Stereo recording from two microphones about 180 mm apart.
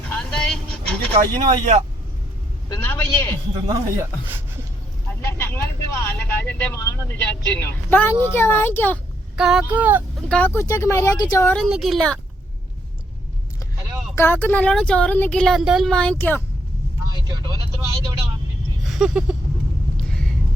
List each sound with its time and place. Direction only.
0.1 s vehicle: 5° left (ahead or behind)
1.1 s speech: 35° right (ahead or behind)
2.6 s speech: 10° left (ahead or behind)
3.7 s speech: 15° right (ahead or behind)
5.2 s speech: 15° left (ahead or behind)
9.3 s speech: 5° right (ahead or behind)
10.2 s speech: 5° left (ahead or behind)
11.5 s speech: centre (ahead or behind)
14.2 s speech: 10° left (ahead or behind)
18.9 s a sound: 5° right (ahead or behind)